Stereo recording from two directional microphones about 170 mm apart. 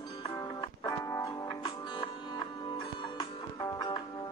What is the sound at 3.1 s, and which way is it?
Music, 25° left (ahead or behind).